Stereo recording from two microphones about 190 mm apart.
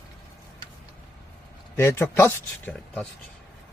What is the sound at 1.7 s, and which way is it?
Speech, 10° left (ahead or behind).